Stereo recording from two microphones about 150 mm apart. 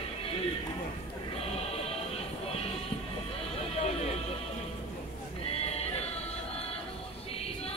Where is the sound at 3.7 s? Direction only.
45° left (ahead or behind).